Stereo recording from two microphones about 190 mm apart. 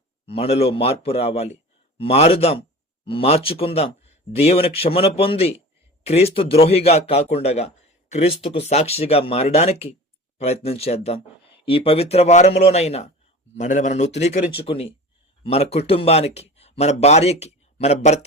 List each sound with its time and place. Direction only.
0.3 s speech: 30° left (ahead or behind)